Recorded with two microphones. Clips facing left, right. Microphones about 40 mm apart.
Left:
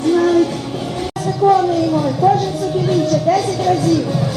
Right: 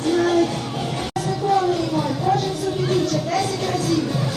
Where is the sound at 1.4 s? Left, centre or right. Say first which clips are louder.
Left 8 dB; centre.